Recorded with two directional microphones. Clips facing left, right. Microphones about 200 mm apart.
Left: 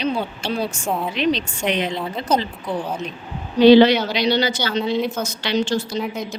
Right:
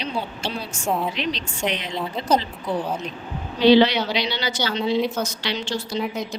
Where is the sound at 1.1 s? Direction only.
55° left (ahead or behind).